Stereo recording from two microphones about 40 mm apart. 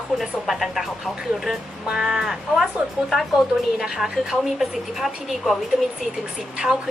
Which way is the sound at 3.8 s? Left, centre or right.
Centre.